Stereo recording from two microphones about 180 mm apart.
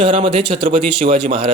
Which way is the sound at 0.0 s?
30° right (ahead or behind).